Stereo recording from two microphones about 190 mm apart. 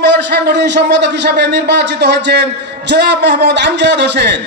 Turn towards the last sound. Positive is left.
turn(degrees=-65)  # may be behind; listen again after turning